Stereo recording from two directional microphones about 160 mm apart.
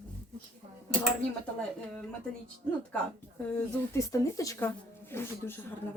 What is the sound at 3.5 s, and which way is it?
Speech, 20° left (ahead or behind).